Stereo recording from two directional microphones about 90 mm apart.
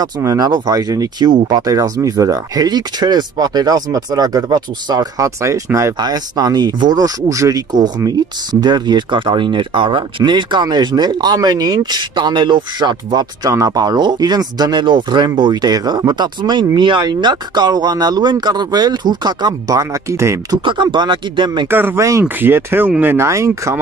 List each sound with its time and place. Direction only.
0.0 s speech: 45° right (ahead or behind)
1.7 s speech: 40° right (ahead or behind)
5.9 s speech: 50° right (ahead or behind); by 17.0 s 65° right (ahead or behind)
17.0 s speech: 55° right (ahead or behind); by 20.3 s 35° right (ahead or behind)
20.6 s speech: 60° right (ahead or behind)
21.6 s speech: 25° right (ahead or behind)